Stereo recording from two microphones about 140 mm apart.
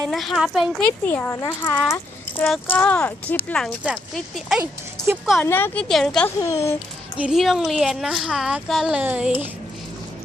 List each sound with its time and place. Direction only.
0.1 s a woman's voice: centre (ahead or behind)
0.9 s speech: 15° left (ahead or behind)
1.9 s a sound: 15° left (ahead or behind)
2.6 s a woman's voice: 10° left (ahead or behind)
5.4 s speech: 15° left (ahead or behind)
5.9 s a woman's voice: centre (ahead or behind)
6.2 s a woman's voice: 20° left (ahead or behind)
7.2 s a woman's voice: centre (ahead or behind)